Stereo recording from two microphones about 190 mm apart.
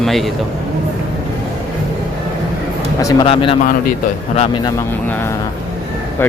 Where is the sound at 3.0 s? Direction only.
20° left (ahead or behind).